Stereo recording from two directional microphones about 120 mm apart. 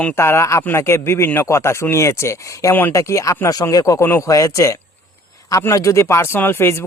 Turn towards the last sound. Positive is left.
turn(degrees=20)  # may be behind; listen again after turning